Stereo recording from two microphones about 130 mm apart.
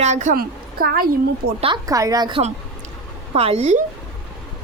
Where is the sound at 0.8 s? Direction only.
90° right.